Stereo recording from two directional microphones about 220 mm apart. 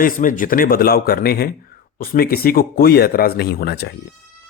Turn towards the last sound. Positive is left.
turn(degrees=45)  # may be behind; listen again after turning